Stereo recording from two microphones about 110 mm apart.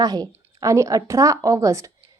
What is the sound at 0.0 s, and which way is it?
A woman's voice, 35° right (ahead or behind).